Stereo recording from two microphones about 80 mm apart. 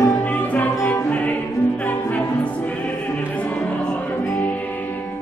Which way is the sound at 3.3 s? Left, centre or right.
Centre.